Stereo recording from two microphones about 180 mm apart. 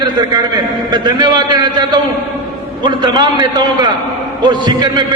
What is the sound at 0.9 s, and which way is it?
A man's voice, 25° right (ahead or behind).